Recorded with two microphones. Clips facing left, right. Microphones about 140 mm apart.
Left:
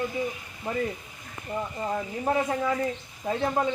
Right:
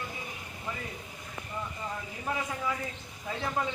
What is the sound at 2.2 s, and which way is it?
Speech, 40° left (ahead or behind).